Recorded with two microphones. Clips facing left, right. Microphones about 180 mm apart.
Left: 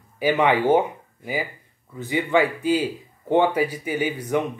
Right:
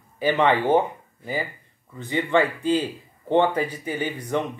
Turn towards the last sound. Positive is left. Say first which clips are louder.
# left 3 dB
turn(degrees=10)  # may be behind; listen again after turning